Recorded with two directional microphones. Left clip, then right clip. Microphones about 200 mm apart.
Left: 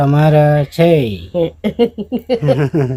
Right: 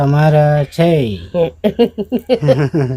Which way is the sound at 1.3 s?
35° right (ahead or behind).